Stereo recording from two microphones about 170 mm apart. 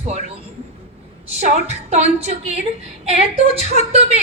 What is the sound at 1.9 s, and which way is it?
A woman's voice, 40° right (ahead or behind).